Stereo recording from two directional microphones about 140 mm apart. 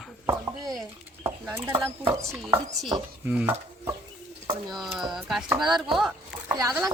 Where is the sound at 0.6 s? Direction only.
Centre (ahead or behind).